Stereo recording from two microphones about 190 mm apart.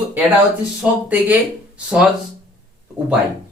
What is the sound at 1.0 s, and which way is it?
Speech, 10° right (ahead or behind).